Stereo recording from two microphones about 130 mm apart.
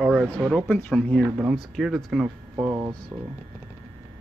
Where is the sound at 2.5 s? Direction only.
20° right (ahead or behind).